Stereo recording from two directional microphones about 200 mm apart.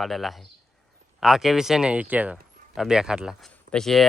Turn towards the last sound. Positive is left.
turn(degrees=0)  # may be behind; listen again after turning